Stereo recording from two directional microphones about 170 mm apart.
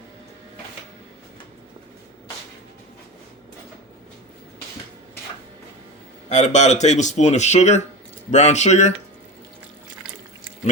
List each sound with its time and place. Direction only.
6.2 s speech: 45° left (ahead or behind)